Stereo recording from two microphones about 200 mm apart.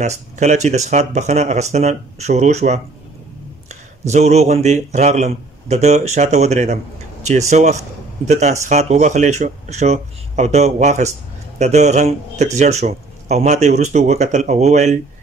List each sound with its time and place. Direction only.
0.0 s speech: 35° right (ahead or behind)
4.1 s a man's voice: 35° right (ahead or behind)